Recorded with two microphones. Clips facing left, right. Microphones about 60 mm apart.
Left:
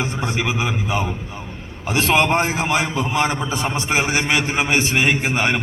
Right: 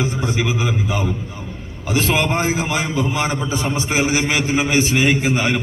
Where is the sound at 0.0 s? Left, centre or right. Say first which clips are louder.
Right 2 dB; left.